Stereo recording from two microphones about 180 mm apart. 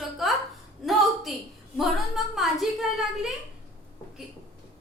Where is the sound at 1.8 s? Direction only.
Centre (ahead or behind).